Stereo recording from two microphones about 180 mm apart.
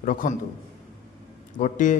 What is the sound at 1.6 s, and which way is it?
Speech, 45° left (ahead or behind).